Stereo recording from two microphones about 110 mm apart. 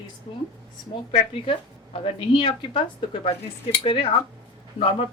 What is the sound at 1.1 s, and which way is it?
A woman's voice, 60° left (ahead or behind).